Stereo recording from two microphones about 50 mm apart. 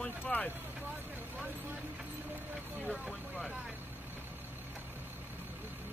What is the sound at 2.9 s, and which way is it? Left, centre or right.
Speech, centre.